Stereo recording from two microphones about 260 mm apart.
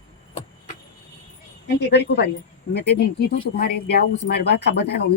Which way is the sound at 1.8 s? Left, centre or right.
Left.